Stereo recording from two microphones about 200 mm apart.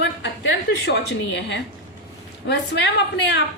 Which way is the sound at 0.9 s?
60° left (ahead or behind).